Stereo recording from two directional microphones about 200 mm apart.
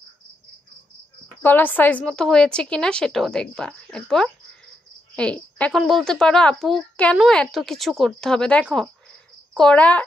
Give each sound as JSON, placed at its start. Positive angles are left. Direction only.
{"t": 1.4, "sound": "speech", "side_deg": 10}